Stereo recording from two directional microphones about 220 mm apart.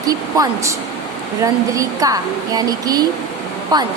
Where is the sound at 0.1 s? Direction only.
15° right (ahead or behind).